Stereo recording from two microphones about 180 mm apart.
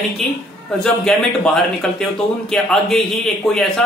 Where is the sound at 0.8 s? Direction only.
5° left (ahead or behind).